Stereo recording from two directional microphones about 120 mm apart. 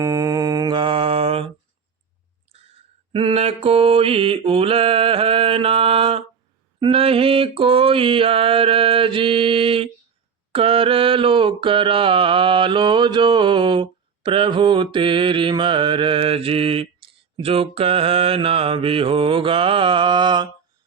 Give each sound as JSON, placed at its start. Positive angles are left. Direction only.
{"t": 0.0, "sound": "mantra", "side_deg": -30}
{"t": 0.8, "sound": "mantra", "side_deg": -45}
{"t": 3.1, "sound": "mantra", "side_deg": -50}